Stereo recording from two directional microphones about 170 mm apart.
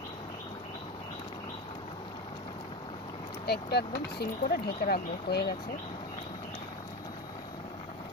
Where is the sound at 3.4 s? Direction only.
70° left (ahead or behind).